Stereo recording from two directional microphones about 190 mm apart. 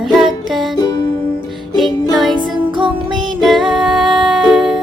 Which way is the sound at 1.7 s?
Centre (ahead or behind).